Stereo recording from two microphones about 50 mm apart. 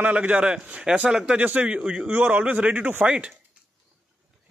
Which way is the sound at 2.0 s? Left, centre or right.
Right.